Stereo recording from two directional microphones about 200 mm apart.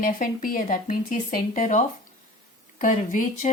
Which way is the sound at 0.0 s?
45° left (ahead or behind).